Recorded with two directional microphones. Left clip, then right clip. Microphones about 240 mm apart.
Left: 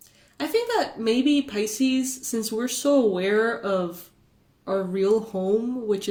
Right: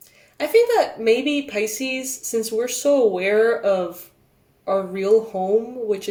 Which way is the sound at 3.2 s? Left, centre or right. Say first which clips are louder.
Right 5 dB; left.